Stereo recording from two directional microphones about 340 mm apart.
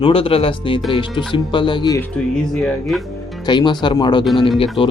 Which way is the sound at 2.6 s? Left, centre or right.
Centre.